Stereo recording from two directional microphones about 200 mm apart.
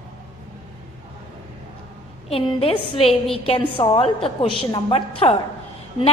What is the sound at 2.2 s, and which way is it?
A woman's voice, 30° left (ahead or behind).